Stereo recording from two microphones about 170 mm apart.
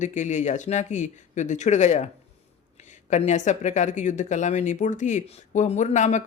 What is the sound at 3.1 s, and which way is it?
Speech, 45° left (ahead or behind).